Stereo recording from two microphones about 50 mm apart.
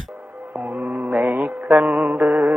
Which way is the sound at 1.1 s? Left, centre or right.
Right.